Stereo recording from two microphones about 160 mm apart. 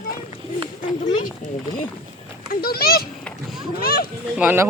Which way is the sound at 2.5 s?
70° left (ahead or behind).